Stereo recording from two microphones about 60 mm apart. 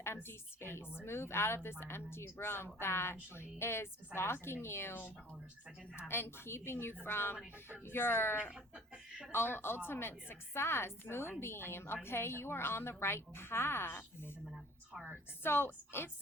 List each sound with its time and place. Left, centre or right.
0.0 s a woman's voice: left
8.5 s speech: centre
9.3 s a woman's voice: left
14.4 s speech: centre
15.4 s a woman's voice: left